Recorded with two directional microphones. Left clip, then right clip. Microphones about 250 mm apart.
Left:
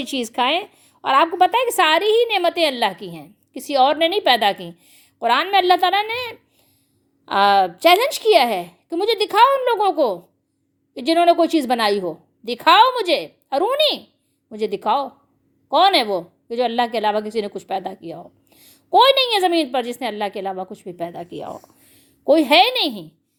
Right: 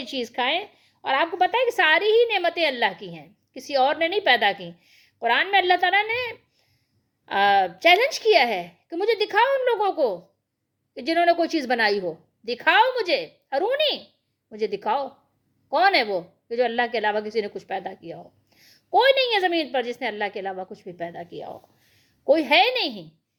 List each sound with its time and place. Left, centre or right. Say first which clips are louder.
0.0 s a woman's voice: left 5 dB; left